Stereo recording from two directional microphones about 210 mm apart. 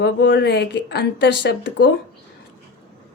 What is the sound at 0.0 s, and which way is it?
Speech, 55° left (ahead or behind).